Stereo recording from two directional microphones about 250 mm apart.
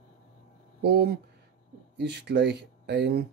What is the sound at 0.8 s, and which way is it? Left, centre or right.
Speech, right.